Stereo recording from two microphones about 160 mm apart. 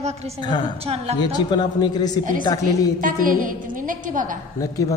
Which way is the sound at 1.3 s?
25° left (ahead or behind).